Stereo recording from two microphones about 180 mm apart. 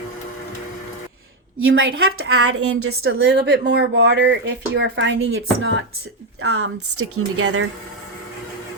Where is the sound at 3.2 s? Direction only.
80° right.